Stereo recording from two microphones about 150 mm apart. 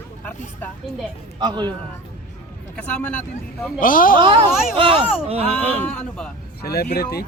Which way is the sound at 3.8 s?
65° left (ahead or behind).